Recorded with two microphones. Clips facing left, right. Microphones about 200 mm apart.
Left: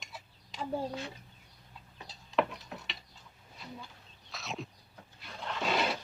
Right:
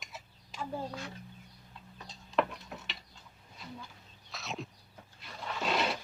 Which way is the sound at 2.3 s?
Centre (ahead or behind).